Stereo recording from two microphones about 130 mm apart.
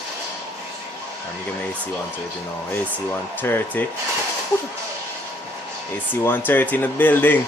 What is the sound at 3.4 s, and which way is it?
Speech, 15° left (ahead or behind).